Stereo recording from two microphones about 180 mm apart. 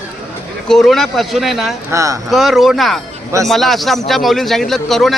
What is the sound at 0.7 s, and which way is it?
A man's voice, centre (ahead or behind).